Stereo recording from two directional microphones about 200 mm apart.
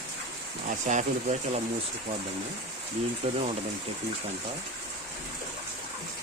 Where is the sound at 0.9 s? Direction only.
35° right (ahead or behind).